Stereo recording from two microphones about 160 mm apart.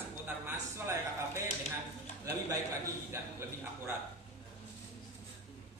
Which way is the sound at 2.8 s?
15° right (ahead or behind).